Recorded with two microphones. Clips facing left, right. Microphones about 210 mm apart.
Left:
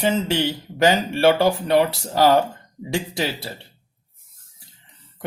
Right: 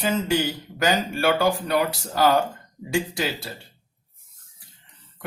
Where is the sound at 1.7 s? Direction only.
25° left (ahead or behind).